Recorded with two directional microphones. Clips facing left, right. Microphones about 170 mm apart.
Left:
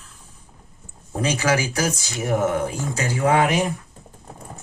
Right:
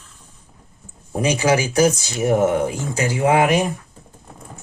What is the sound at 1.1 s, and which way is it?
Speech, 15° right (ahead or behind).